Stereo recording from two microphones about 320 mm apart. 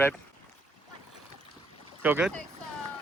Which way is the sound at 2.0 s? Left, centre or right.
Centre.